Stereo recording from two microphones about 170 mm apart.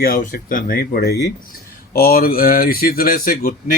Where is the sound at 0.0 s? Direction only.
60° left (ahead or behind).